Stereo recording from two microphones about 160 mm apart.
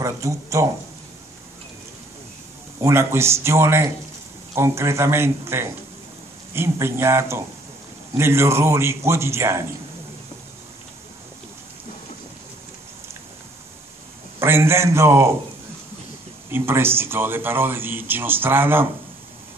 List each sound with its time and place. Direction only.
0.0 s speech: 20° right (ahead or behind)
2.8 s speech: 15° right (ahead or behind)
14.4 s speech: 15° right (ahead or behind)
16.4 s speech: 15° right (ahead or behind)